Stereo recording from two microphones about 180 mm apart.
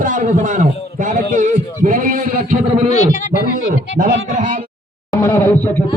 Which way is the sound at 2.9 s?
40° left (ahead or behind).